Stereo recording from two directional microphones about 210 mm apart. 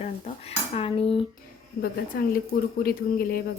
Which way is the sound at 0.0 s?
30° left (ahead or behind).